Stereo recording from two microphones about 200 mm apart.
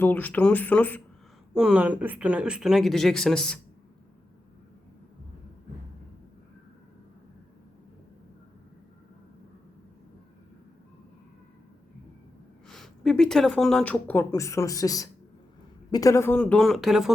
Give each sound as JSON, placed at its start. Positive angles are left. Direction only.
{"t": 0.0, "sound": "speech", "side_deg": 10}
{"t": 1.5, "sound": "speech", "side_deg": -5}
{"t": 12.6, "sound": "speech", "side_deg": 0}